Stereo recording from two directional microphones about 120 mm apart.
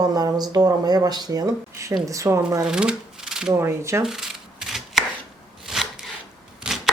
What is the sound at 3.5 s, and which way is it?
Speech, 25° right (ahead or behind).